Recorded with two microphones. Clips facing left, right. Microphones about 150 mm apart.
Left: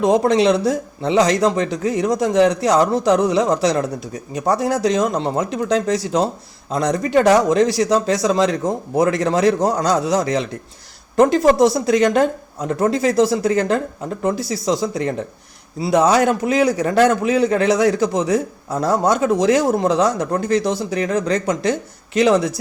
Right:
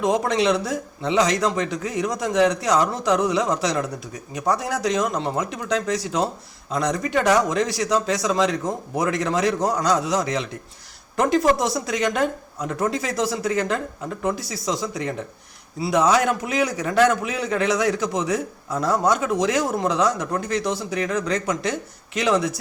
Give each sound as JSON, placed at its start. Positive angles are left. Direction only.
{"t": 0.0, "sound": "a man's voice", "side_deg": 35}